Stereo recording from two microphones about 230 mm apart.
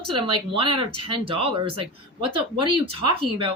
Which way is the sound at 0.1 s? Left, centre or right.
Right.